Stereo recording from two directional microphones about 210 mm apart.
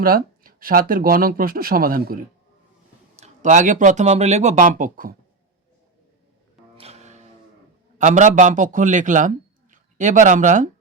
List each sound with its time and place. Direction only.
0.0 s speech: 45° right (ahead or behind)
3.2 s speech: 35° right (ahead or behind)
6.7 s music: 30° right (ahead or behind)
7.9 s a man's voice: 35° right (ahead or behind)